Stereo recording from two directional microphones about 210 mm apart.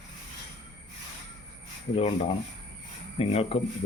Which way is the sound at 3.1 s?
30° left (ahead or behind).